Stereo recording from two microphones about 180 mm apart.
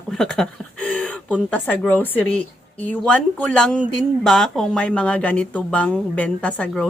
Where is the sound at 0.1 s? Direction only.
Centre (ahead or behind).